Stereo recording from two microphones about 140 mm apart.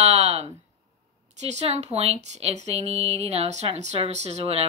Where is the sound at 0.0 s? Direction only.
50° right (ahead or behind).